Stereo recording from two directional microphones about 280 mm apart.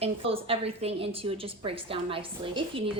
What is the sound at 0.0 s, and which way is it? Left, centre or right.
A woman's voice, centre.